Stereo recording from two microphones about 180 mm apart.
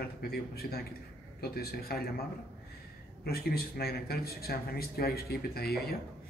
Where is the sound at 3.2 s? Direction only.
60° left (ahead or behind).